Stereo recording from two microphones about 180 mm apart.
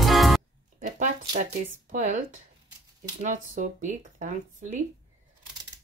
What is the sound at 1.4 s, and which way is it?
Speech, 45° right (ahead or behind).